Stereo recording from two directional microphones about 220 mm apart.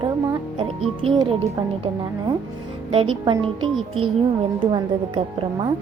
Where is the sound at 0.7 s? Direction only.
25° right (ahead or behind).